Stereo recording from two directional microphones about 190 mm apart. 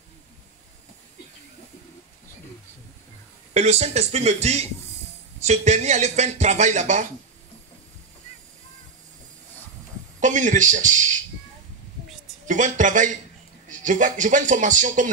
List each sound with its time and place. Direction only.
3.5 s speech: 35° right (ahead or behind)
10.2 s speech: 40° right (ahead or behind)
12.4 s a man's voice: 40° right (ahead or behind)